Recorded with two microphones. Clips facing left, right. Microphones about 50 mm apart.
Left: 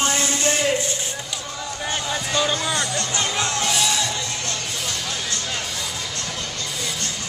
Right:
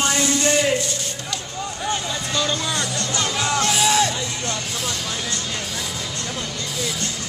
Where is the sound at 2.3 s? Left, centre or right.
Centre.